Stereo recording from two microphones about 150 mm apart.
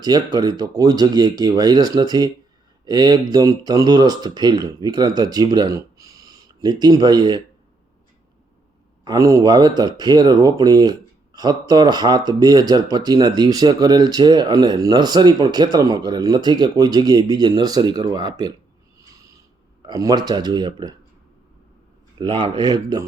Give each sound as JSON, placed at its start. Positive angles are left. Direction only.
{"t": 0.0, "sound": "speech", "side_deg": -25}
{"t": 9.0, "sound": "speech", "side_deg": -20}
{"t": 19.8, "sound": "speech", "side_deg": -25}
{"t": 22.2, "sound": "speech", "side_deg": -35}
{"t": 22.5, "sound": "speech", "side_deg": -25}